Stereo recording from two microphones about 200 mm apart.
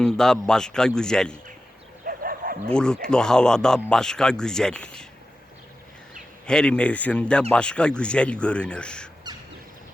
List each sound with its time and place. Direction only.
0.0 s speech: 5° left (ahead or behind)
2.0 s bow-wow: 45° right (ahead or behind)
2.7 s speech: 5° left (ahead or behind)
6.4 s speech: 5° left (ahead or behind)